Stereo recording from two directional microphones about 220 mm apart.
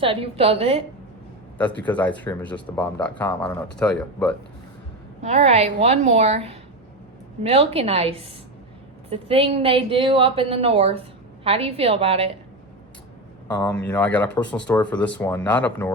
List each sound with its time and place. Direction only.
0.0 s speech: 25° right (ahead or behind)
1.8 s speech: 5° left (ahead or behind)
5.2 s speech: 30° right (ahead or behind)
13.5 s speech: 5° left (ahead or behind)